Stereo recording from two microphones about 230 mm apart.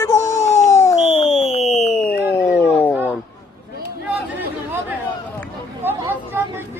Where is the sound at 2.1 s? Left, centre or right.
Centre.